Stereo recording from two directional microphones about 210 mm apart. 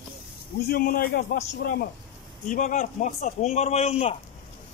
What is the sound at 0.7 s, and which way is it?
A man's voice, 45° left (ahead or behind).